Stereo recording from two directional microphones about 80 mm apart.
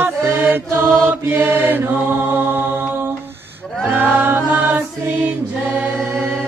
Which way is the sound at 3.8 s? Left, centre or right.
Right.